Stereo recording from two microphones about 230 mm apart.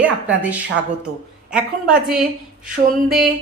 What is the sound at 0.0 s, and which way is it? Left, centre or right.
Speech, centre.